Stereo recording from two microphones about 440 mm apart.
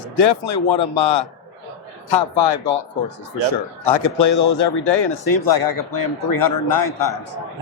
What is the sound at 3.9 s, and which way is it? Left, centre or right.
A man's voice, left.